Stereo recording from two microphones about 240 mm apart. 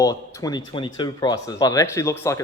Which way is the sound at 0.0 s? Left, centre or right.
Centre.